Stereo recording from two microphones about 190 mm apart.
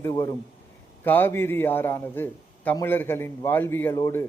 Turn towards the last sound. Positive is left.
turn(degrees=15)  # may be behind; listen again after turning